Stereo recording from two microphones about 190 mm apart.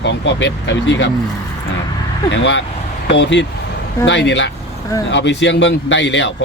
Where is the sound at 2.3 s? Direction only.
70° left (ahead or behind).